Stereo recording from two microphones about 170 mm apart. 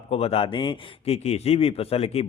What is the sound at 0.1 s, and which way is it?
Speech, 35° left (ahead or behind).